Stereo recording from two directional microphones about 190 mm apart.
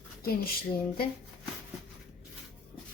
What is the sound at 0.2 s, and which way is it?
Speech, 50° left (ahead or behind).